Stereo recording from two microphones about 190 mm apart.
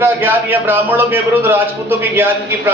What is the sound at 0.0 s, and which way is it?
A man's voice, 10° right (ahead or behind).